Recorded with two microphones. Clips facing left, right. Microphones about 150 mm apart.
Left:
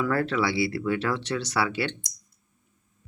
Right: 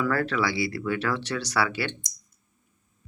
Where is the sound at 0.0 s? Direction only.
25° left (ahead or behind).